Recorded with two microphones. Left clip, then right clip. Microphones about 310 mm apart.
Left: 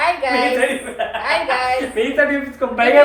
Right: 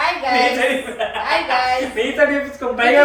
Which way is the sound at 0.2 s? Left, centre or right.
Left.